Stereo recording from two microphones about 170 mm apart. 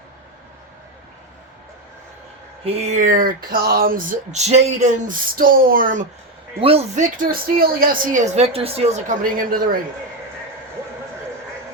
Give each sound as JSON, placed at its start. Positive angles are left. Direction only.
{"t": 2.6, "sound": "speech", "side_deg": -40}
{"t": 6.6, "sound": "speech", "side_deg": -35}
{"t": 9.5, "sound": "a man's voice", "side_deg": -55}